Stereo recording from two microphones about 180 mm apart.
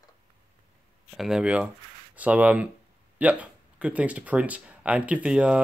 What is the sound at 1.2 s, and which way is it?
Speech, 5° right (ahead or behind).